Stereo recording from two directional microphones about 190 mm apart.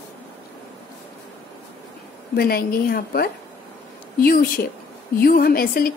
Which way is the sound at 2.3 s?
55° left (ahead or behind).